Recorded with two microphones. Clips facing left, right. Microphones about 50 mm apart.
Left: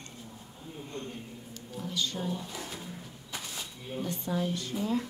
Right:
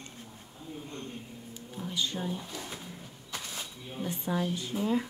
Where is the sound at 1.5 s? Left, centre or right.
Centre.